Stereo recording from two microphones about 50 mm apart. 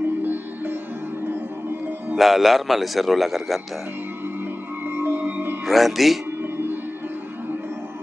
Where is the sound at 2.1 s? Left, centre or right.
Centre.